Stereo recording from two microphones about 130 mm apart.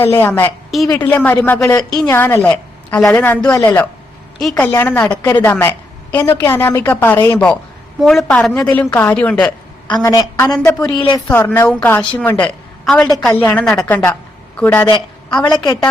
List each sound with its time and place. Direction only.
0.0 s a woman's voice: 15° left (ahead or behind)
4.4 s a woman's voice: 5° left (ahead or behind)
4.6 s a woman's voice: 15° left (ahead or behind)
10.0 s a woman's voice: 25° left (ahead or behind)
10.9 s a woman's voice: 35° left (ahead or behind)
11.3 s a woman's voice: 15° left (ahead or behind)
14.8 s a woman's voice: 35° left (ahead or behind)